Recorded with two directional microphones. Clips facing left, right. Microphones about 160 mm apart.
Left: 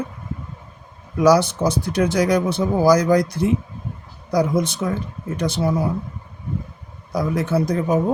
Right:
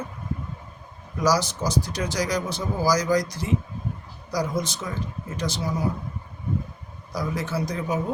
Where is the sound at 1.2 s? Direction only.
60° left (ahead or behind).